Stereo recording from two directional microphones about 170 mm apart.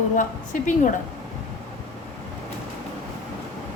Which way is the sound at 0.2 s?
50° left (ahead or behind).